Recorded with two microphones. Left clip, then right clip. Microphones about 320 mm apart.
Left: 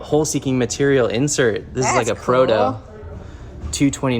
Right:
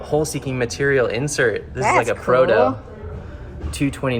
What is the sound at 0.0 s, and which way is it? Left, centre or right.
Speech, left.